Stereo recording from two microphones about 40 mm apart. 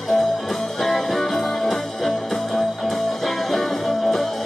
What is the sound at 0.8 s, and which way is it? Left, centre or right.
Music, centre.